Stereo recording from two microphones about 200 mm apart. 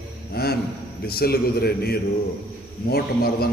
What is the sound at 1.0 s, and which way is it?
A man's voice, 50° left (ahead or behind).